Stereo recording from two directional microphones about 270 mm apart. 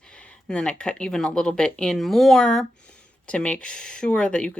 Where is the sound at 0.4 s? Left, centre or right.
Centre.